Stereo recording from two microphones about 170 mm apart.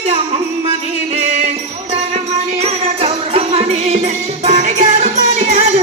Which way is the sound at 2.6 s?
35° right (ahead or behind).